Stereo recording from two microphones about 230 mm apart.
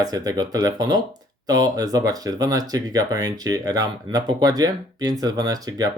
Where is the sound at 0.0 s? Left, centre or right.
Centre.